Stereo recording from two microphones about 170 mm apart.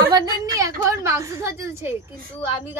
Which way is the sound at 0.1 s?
20° right (ahead or behind).